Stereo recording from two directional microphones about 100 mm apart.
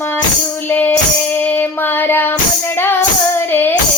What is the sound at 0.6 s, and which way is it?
Child singing, 20° left (ahead or behind).